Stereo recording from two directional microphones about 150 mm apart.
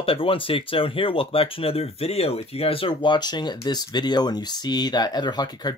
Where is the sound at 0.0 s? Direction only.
40° left (ahead or behind).